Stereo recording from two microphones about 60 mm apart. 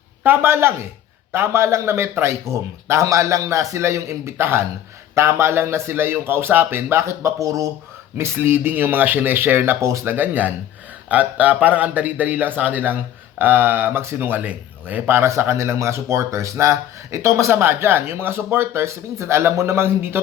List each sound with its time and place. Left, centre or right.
0.4 s speech: right
3.0 s a man's voice: right
8.4 s speech: right
9.8 s speech: right
10.1 s a man's voice: right
14.0 s speech: right
14.3 s a man's voice: right
15.0 s speech: right